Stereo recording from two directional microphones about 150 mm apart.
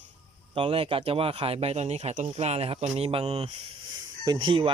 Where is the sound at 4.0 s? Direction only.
25° right (ahead or behind).